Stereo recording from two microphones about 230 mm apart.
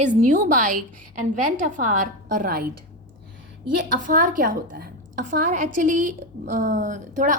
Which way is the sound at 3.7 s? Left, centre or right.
Right.